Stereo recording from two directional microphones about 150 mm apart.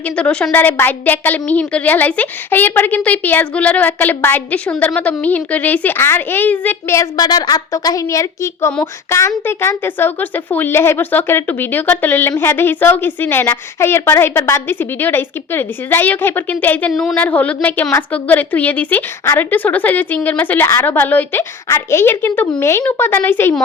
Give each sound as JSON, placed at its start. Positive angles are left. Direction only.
{"t": 0.2, "sound": "speech", "side_deg": 5}
{"t": 16.9, "sound": "a woman's voice", "side_deg": 0}